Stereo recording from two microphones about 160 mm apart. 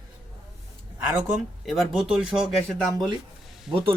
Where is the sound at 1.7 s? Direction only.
Centre (ahead or behind).